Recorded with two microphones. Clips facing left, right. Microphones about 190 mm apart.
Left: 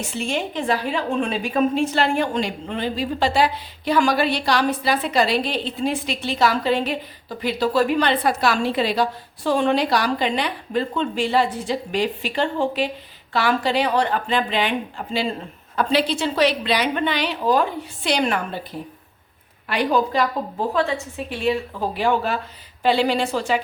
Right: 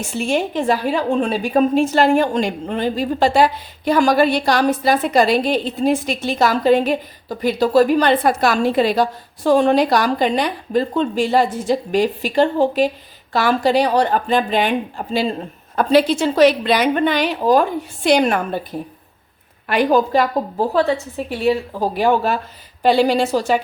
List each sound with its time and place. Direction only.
0.3 s a woman's voice: 45° right (ahead or behind)
19.6 s a woman's voice: 50° right (ahead or behind)
20.6 s a woman's voice: 35° right (ahead or behind)